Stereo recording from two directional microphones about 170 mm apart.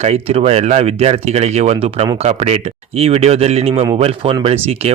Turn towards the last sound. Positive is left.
turn(degrees=-35)  # may be behind; listen again after turning